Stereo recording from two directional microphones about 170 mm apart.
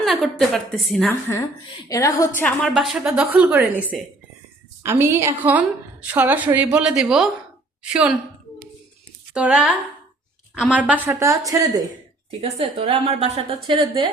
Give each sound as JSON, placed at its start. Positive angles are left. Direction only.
{"t": 0.0, "sound": "a woman's voice", "side_deg": 0}
{"t": 1.9, "sound": "a woman's voice", "side_deg": 20}
{"t": 2.6, "sound": "a woman's voice", "side_deg": 0}
{"t": 4.8, "sound": "a woman's voice", "side_deg": -15}
{"t": 9.3, "sound": "a woman's voice", "side_deg": -5}
{"t": 12.4, "sound": "a woman's voice", "side_deg": -35}